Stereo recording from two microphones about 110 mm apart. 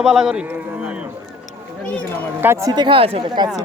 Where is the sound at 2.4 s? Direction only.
25° right (ahead or behind).